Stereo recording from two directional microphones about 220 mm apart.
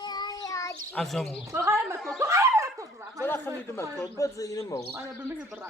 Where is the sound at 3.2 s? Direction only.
10° left (ahead or behind).